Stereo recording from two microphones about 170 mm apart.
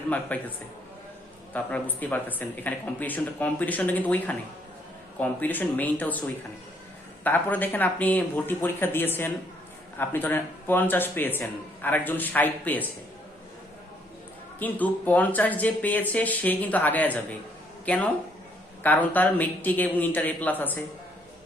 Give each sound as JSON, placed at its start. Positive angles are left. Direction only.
{"t": 0.1, "sound": "speech", "side_deg": 10}
{"t": 1.5, "sound": "speech", "side_deg": 10}
{"t": 7.3, "sound": "speech", "side_deg": 10}
{"t": 14.6, "sound": "speech", "side_deg": 10}